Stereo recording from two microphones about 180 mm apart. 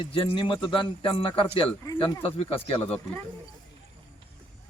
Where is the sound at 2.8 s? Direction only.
10° left (ahead or behind).